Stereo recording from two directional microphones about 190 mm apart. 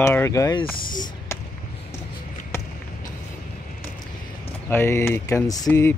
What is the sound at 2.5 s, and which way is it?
Basketball bounce, 15° left (ahead or behind).